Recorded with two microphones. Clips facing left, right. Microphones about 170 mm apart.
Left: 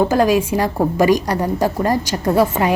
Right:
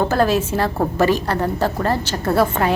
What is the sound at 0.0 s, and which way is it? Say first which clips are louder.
A woman's voice: left 3 dB; 10° left (ahead or behind).